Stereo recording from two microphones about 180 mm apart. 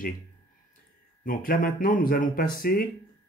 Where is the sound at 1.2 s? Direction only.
50° left (ahead or behind).